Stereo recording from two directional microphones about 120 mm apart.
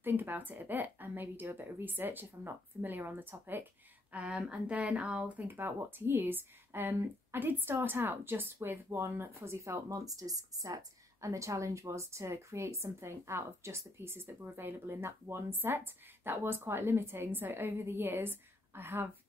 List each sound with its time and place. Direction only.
0.0 s a woman's voice: 15° right (ahead or behind)